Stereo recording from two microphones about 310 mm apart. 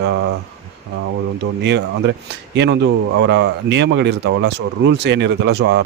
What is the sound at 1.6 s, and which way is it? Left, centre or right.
Speech, right.